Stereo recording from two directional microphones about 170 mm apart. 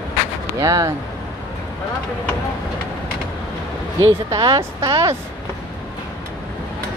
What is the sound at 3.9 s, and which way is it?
Speech, 20° right (ahead or behind).